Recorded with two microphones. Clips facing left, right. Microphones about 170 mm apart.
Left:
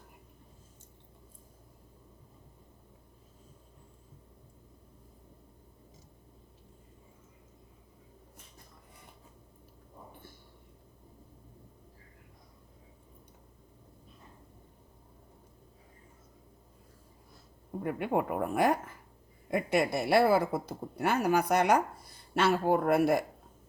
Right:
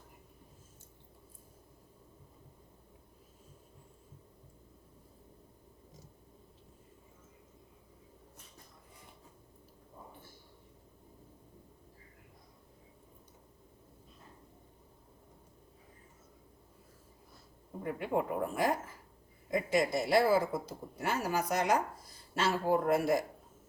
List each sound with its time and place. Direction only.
17.8 s a woman's voice: 60° left (ahead or behind)